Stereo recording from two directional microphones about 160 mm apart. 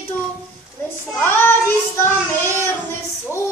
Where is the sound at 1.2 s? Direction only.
15° left (ahead or behind).